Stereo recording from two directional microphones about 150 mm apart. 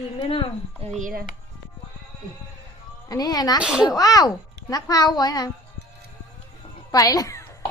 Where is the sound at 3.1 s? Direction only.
25° left (ahead or behind).